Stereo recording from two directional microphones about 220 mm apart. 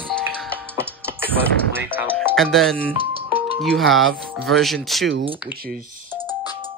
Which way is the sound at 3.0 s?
25° right (ahead or behind).